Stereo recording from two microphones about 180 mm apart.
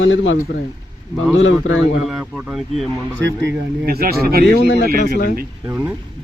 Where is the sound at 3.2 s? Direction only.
90° right.